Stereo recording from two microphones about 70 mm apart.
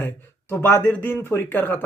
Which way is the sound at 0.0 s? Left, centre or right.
Left.